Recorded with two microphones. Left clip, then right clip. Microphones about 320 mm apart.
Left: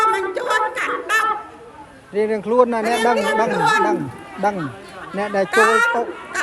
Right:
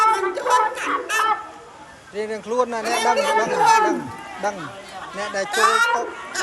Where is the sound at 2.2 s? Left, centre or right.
Centre.